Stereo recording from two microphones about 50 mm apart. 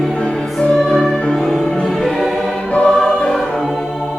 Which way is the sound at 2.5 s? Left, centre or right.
Left.